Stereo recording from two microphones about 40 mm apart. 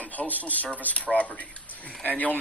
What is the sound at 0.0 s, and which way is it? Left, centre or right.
A man's voice, left.